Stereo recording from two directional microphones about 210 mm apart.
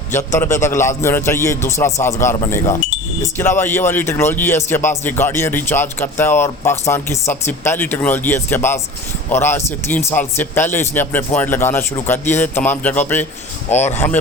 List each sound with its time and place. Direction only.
0.6 s speech: 15° left (ahead or behind)
13.7 s speech: 30° left (ahead or behind)
13.9 s speech: 10° left (ahead or behind)